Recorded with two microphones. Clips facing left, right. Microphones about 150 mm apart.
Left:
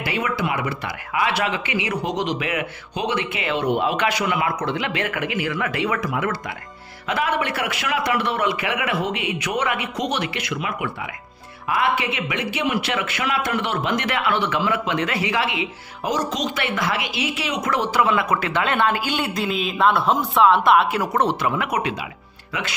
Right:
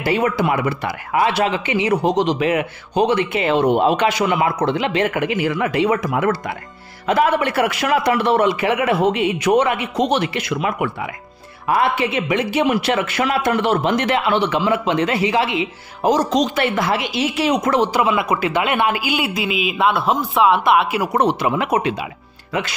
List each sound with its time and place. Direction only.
0.0 s a man's voice: 40° right (ahead or behind); by 6.0 s 20° right (ahead or behind)
6.0 s a man's voice: 40° right (ahead or behind)
17.7 s speech: 15° right (ahead or behind)